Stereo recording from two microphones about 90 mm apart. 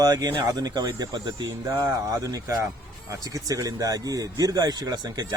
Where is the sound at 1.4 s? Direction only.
40° right (ahead or behind).